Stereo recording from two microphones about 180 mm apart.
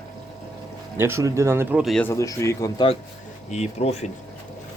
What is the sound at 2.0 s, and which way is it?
Speech, 15° left (ahead or behind).